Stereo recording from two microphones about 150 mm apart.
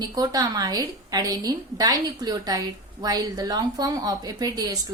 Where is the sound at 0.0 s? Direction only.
25° right (ahead or behind).